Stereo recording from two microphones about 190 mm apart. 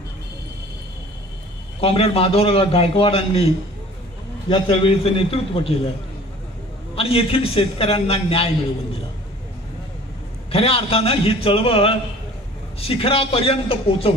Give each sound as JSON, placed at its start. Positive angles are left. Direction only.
{"t": 1.8, "sound": "a man's voice", "side_deg": 30}
{"t": 4.5, "sound": "a man's voice", "side_deg": 25}
{"t": 7.0, "sound": "a man's voice", "side_deg": 30}
{"t": 10.5, "sound": "a man's voice", "side_deg": 30}